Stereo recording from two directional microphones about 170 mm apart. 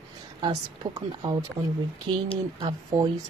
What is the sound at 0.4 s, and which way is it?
Speech, 25° right (ahead or behind).